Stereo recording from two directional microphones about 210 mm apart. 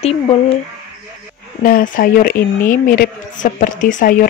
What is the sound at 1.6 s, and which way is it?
Speech, 45° left (ahead or behind).